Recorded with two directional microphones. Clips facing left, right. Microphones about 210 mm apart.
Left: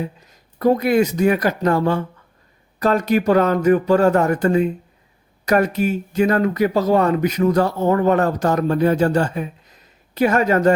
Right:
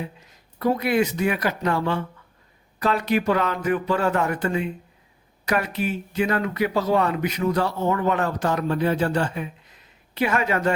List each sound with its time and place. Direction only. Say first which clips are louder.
0.0 s speech: left 6 dB; 40° left (ahead or behind)